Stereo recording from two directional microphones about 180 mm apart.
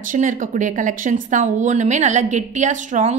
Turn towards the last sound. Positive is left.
turn(degrees=-45)  # may be behind; listen again after turning